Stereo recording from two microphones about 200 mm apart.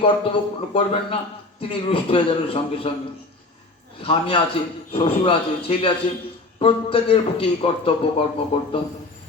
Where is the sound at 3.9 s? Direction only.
25° left (ahead or behind).